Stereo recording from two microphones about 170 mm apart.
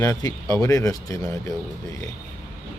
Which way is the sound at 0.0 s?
20° left (ahead or behind).